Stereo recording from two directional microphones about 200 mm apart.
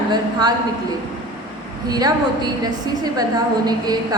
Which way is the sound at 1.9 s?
20° right (ahead or behind).